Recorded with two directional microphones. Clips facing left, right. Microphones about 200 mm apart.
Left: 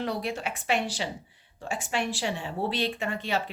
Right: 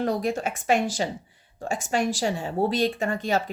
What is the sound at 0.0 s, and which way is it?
A woman's voice, 45° right (ahead or behind).